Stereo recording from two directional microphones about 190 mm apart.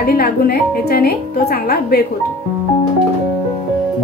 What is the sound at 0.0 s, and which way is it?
Speech, 55° left (ahead or behind).